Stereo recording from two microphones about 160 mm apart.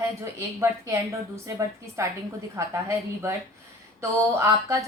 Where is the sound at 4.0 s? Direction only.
20° right (ahead or behind).